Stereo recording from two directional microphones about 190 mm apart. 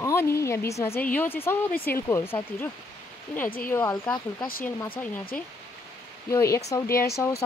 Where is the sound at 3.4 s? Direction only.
50° left (ahead or behind).